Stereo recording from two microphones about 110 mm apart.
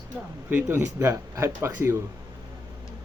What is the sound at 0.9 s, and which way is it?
Speech, 25° right (ahead or behind).